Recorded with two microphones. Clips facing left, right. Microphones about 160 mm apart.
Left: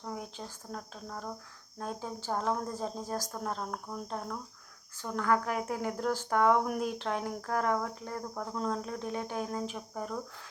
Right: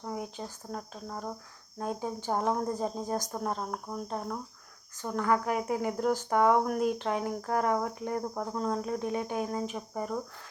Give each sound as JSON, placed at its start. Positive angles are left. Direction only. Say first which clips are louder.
{"t": 0.0, "sound": "cricket", "louder": "right 3 dB", "side_deg": -5}
{"t": 1.8, "sound": "speech", "louder": "right 4 dB", "side_deg": -10}
{"t": 5.0, "sound": "cricket", "louder": "right 2 dB", "side_deg": -5}
{"t": 6.3, "sound": "speech", "louder": "right 1 dB", "side_deg": -5}
{"t": 8.5, "sound": "cricket", "louder": "right 2 dB", "side_deg": -5}